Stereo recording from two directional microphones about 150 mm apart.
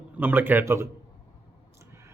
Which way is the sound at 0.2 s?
10° right (ahead or behind).